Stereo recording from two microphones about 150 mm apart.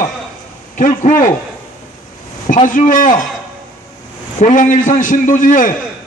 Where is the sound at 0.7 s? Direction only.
60° left (ahead or behind).